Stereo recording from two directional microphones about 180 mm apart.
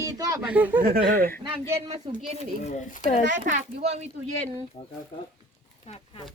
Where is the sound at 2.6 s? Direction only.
40° left (ahead or behind).